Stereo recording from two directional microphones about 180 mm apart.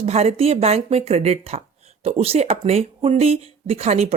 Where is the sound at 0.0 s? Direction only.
35° right (ahead or behind).